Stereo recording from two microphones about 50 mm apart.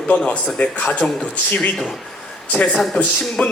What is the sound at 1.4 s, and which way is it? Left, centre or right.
A man's voice, left.